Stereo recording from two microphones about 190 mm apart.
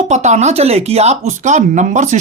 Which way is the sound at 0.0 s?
35° right (ahead or behind).